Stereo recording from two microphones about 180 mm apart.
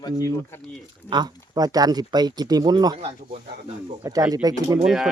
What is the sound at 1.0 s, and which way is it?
Speech, 25° right (ahead or behind).